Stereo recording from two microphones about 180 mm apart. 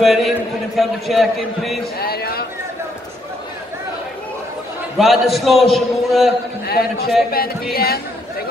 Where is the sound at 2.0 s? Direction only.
60° left (ahead or behind).